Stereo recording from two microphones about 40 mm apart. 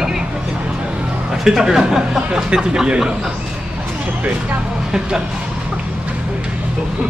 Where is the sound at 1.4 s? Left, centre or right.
Centre.